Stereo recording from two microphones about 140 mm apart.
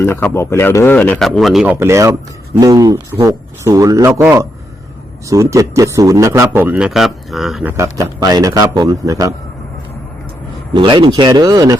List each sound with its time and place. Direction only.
0.0 s speech: 15° left (ahead or behind)
1.6 s a man's voice: 15° right (ahead or behind)
7.6 s a man's voice: 20° right (ahead or behind)
10.8 s a man's voice: 35° right (ahead or behind)